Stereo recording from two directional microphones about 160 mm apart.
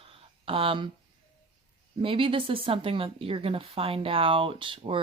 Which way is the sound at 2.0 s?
35° right (ahead or behind).